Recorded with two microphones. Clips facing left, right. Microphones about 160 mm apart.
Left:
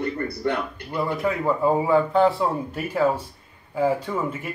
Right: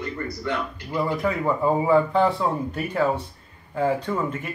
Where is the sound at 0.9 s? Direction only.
Centre (ahead or behind).